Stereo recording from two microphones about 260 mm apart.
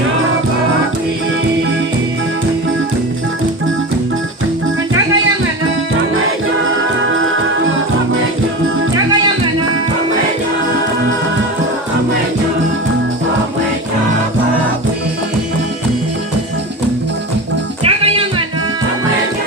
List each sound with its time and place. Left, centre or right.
17.8 s music: right